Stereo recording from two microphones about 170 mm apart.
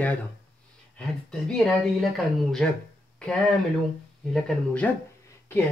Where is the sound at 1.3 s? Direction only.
5° left (ahead or behind).